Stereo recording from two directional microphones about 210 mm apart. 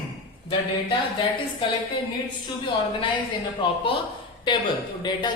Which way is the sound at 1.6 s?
25° left (ahead or behind).